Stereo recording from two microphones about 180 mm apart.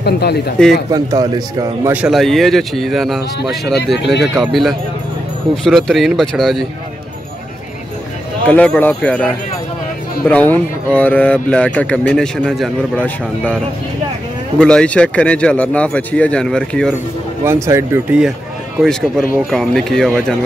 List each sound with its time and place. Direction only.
0.0 s speech: 65° left (ahead or behind)
0.6 s speech: 5° left (ahead or behind)
0.9 s a man's voice: 20° right (ahead or behind)
2.0 s speech: centre (ahead or behind)
3.7 s speech: 65° left (ahead or behind)
4.2 s speech: centre (ahead or behind)
8.5 s speech: 10° left (ahead or behind)
14.6 s speech: 5° left (ahead or behind)
17.5 s speech: 15° right (ahead or behind)
18.8 s speech: centre (ahead or behind)